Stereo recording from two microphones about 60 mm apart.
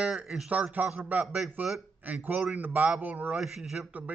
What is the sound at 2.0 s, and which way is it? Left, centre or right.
Speech, right.